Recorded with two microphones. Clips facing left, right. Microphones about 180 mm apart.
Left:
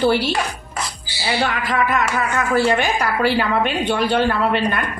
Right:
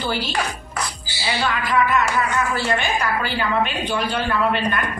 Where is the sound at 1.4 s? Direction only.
55° left (ahead or behind).